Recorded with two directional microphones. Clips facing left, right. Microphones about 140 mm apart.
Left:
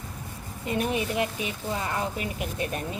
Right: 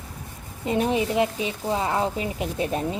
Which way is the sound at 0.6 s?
25° right (ahead or behind).